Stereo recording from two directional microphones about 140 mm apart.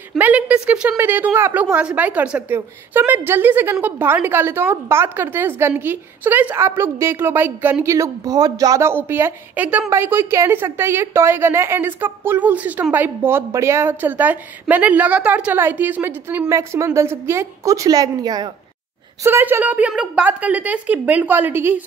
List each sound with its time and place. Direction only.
0.2 s a woman's voice: 10° right (ahead or behind); by 18.5 s 30° right (ahead or behind)
19.2 s a woman's voice: 15° right (ahead or behind)